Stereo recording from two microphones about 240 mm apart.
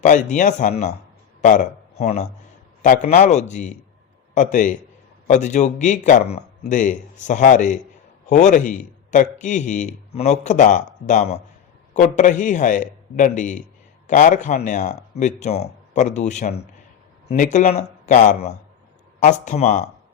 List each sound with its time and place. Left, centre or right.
0.0 s a man's voice: left